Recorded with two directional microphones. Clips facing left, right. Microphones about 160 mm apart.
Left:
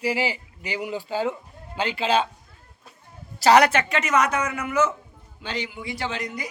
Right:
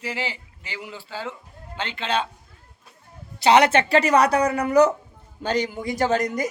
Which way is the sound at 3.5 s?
25° right (ahead or behind).